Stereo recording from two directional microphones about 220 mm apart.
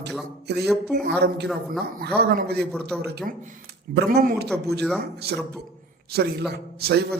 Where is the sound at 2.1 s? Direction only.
45° right (ahead or behind).